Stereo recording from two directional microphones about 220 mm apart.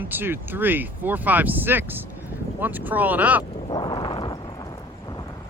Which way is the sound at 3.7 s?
20° left (ahead or behind).